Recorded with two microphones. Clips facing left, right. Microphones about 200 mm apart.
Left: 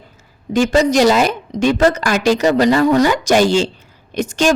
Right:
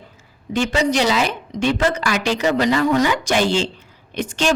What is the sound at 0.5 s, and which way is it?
A woman's voice, 45° left (ahead or behind).